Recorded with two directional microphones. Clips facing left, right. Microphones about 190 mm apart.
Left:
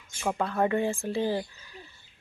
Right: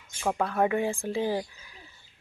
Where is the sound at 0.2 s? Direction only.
5° right (ahead or behind).